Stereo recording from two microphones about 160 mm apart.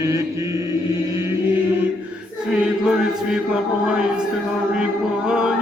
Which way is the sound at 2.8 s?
5° right (ahead or behind).